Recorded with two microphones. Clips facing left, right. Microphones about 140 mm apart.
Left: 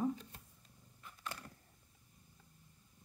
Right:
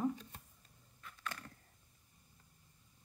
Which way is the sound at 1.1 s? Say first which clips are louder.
Right 1 dB; 15° left (ahead or behind).